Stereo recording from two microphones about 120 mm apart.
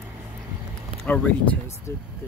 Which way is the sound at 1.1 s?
15° left (ahead or behind).